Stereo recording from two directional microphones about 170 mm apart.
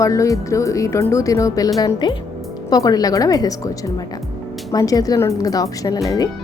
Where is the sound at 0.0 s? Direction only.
20° left (ahead or behind).